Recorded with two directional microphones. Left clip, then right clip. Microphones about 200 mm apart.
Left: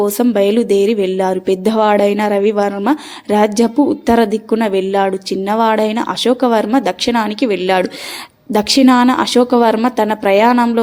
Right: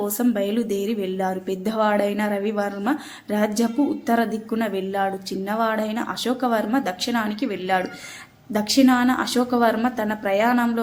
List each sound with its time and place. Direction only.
0.0 s speech: 35° left (ahead or behind)